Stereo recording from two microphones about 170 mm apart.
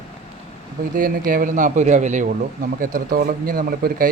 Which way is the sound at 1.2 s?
55° right (ahead or behind).